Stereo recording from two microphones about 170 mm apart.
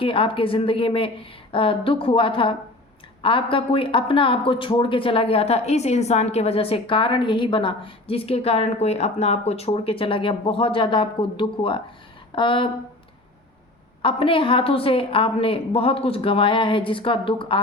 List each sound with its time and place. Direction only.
0.0 s speech: 30° left (ahead or behind)
14.0 s speech: 30° left (ahead or behind)